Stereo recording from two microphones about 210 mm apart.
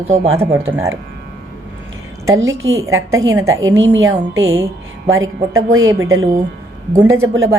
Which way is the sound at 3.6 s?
65° right (ahead or behind).